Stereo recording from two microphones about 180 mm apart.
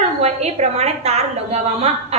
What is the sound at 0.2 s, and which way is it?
A woman's voice, 35° right (ahead or behind).